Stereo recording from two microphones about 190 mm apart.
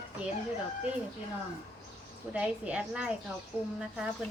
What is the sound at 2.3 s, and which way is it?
A woman's voice, 5° right (ahead or behind).